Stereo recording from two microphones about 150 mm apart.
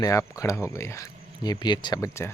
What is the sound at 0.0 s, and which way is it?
Speech, 20° left (ahead or behind).